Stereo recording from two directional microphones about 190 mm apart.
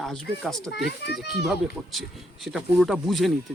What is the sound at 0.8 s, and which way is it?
Speech, 60° left (ahead or behind).